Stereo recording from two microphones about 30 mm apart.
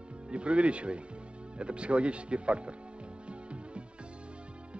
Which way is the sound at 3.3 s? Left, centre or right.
Right.